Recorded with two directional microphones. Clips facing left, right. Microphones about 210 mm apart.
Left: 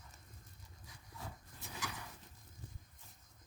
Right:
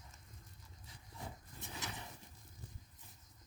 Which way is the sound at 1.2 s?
20° right (ahead or behind).